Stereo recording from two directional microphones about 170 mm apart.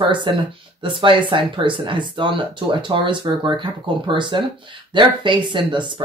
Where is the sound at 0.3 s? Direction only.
30° right (ahead or behind).